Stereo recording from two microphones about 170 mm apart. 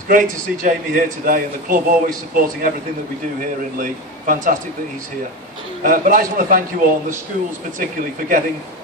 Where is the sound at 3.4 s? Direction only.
55° right (ahead or behind).